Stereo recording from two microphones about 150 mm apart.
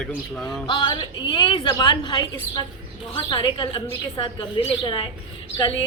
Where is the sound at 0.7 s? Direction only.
30° left (ahead or behind).